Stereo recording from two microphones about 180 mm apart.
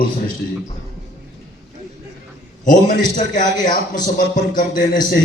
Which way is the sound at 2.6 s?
45° left (ahead or behind).